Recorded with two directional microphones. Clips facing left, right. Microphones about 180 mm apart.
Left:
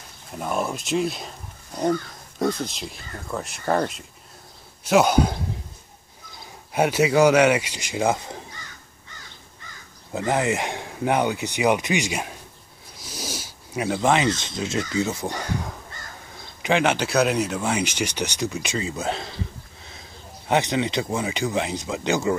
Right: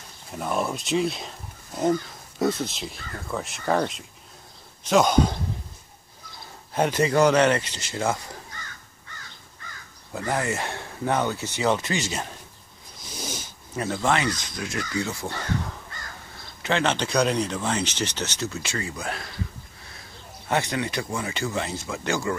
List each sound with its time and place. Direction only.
0.3 s speech: centre (ahead or behind)
6.7 s speech: 10° left (ahead or behind)
10.1 s speech: 20° left (ahead or behind)
20.4 s speech: 20° left (ahead or behind)